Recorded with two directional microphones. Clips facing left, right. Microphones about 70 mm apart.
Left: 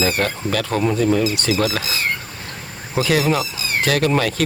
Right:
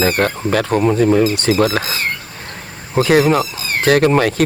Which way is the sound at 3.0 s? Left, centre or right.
Right.